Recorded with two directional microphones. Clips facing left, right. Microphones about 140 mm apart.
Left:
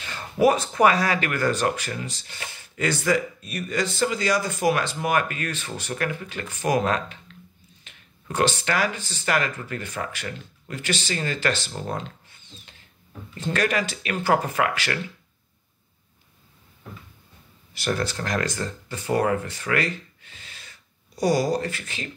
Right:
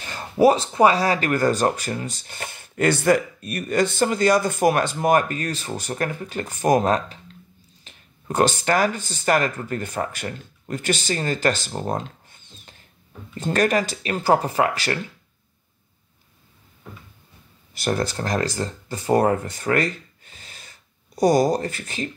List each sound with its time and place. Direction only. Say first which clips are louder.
0.0 s speech: right 3 dB; 30° right (ahead or behind)
17.7 s speech: right 3 dB; 40° right (ahead or behind)